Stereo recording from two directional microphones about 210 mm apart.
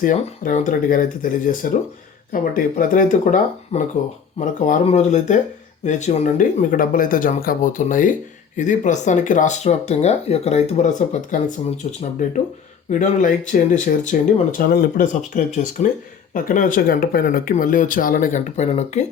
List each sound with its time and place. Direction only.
0.0 s speech: 40° left (ahead or behind)